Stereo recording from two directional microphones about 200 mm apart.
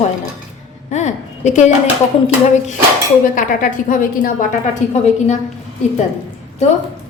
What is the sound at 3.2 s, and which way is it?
A woman's voice, 40° left (ahead or behind).